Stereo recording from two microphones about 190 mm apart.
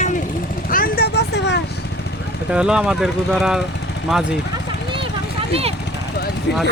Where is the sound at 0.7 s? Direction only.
50° left (ahead or behind).